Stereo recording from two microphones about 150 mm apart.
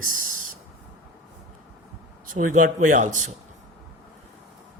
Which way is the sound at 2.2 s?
65° right (ahead or behind).